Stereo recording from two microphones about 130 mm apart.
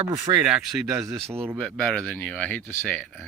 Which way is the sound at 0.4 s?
5° right (ahead or behind).